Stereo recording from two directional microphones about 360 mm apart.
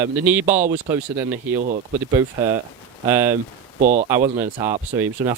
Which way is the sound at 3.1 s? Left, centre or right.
Centre.